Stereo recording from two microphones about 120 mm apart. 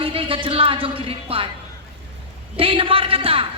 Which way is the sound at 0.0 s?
50° right (ahead or behind).